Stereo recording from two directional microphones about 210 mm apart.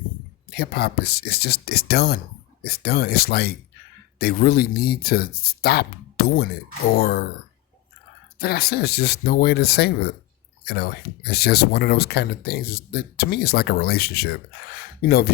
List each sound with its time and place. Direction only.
0.5 s speech: 45° left (ahead or behind)
8.4 s speech: 45° left (ahead or behind)